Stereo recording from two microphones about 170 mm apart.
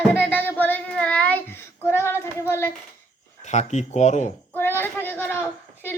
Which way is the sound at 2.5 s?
15° left (ahead or behind).